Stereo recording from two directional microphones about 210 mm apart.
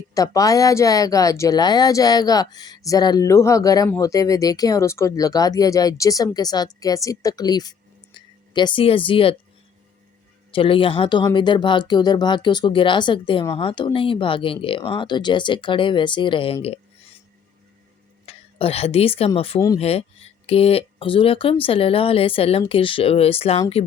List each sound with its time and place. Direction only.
0.1 s speech: 15° left (ahead or behind)
10.5 s speech: 25° left (ahead or behind)
18.3 s speech: 30° left (ahead or behind)